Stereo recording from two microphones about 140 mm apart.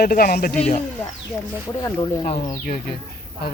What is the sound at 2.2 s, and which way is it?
Speech, 90° left.